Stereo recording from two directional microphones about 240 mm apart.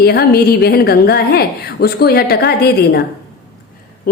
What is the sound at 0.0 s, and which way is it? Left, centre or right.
A woman's voice, left.